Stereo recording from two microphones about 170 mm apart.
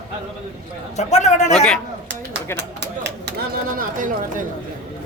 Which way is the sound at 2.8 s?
85° right.